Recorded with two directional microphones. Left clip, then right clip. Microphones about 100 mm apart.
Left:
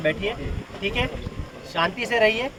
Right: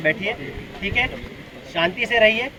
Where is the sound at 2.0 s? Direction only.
20° left (ahead or behind).